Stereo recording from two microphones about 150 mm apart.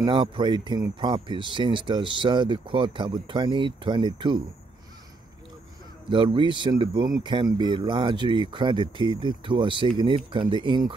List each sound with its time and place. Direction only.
0.0 s speech: 30° right (ahead or behind)
6.0 s speech: 35° right (ahead or behind)